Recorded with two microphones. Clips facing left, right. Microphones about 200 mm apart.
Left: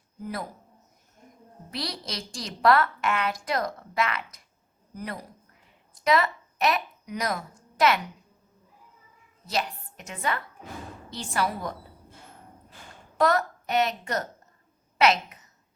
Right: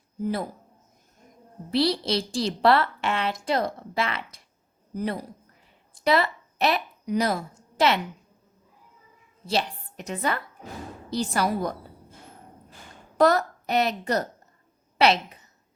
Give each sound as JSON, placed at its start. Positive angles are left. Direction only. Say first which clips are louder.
{"t": 1.7, "sound": "a woman's voice", "louder": "right 11 dB", "side_deg": -30}
{"t": 9.5, "sound": "a woman's voice", "louder": "right 3 dB", "side_deg": -30}
{"t": 13.1, "sound": "a woman's voice", "louder": "right 3 dB", "side_deg": -35}